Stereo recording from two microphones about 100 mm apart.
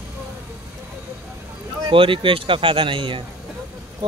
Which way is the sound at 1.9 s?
60° right (ahead or behind).